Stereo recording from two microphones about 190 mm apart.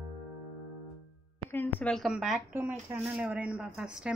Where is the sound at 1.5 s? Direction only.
10° left (ahead or behind).